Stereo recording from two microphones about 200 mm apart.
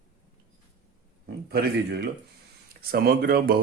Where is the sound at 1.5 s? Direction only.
50° right (ahead or behind).